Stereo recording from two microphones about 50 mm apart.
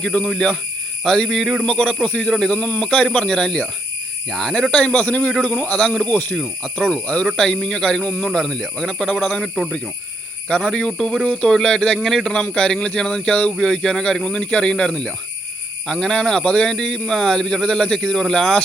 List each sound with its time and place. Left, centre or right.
0.0 s speech: left
0.3 s speech: centre
4.3 s speech: centre
4.7 s speech: left
4.9 s speech: left
5.4 s speech: left
6.3 s speech: centre
7.3 s speech: centre